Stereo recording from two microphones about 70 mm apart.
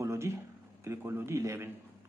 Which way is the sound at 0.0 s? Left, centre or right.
Right.